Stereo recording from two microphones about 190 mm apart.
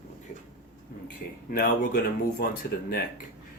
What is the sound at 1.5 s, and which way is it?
Speech, 50° left (ahead or behind).